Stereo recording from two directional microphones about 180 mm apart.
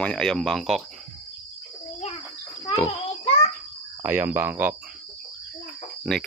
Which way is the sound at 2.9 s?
30° left (ahead or behind).